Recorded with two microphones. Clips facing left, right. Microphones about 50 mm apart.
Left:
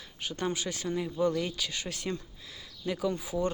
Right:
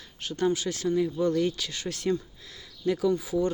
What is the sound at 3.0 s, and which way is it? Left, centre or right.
Speech, left.